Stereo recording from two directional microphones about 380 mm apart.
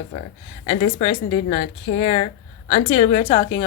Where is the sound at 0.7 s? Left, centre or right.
Centre.